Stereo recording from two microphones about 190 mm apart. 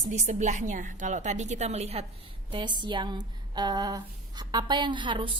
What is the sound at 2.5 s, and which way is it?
A woman's voice, 25° right (ahead or behind).